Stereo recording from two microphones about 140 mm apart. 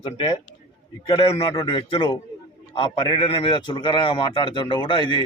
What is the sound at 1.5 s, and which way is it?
A man's voice, 30° left (ahead or behind).